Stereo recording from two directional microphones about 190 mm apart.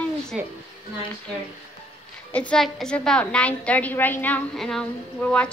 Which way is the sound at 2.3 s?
5° left (ahead or behind).